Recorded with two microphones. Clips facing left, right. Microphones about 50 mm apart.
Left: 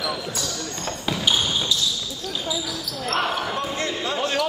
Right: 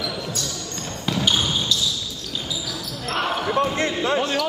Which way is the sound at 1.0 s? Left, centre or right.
Centre.